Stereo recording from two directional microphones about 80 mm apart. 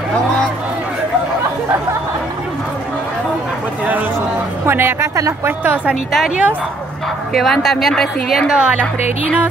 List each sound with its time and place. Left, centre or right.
4.6 s a woman's voice: right
6.1 s a woman's voice: centre
8.5 s a woman's voice: centre